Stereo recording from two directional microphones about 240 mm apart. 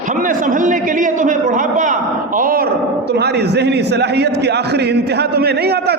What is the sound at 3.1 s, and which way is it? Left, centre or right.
A man's voice, right.